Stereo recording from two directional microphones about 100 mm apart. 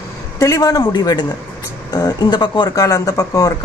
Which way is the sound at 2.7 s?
35° left (ahead or behind).